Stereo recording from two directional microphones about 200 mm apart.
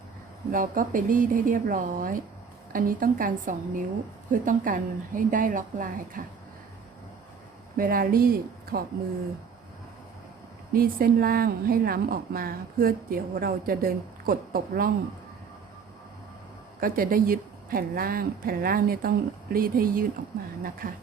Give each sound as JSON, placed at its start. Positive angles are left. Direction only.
{"t": 0.5, "sound": "a woman's voice", "side_deg": -45}
{"t": 7.8, "sound": "a woman's voice", "side_deg": -45}
{"t": 10.7, "sound": "a woman's voice", "side_deg": -45}
{"t": 16.8, "sound": "a woman's voice", "side_deg": -45}